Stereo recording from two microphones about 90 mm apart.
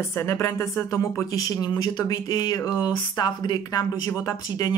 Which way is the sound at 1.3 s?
50° left (ahead or behind).